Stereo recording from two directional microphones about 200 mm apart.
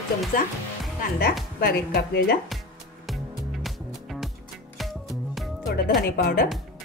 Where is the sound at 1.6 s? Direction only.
50° left (ahead or behind).